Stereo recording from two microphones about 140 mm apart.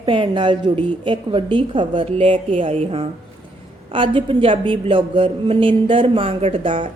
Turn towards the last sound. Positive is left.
turn(degrees=-40)  # may be behind; listen again after turning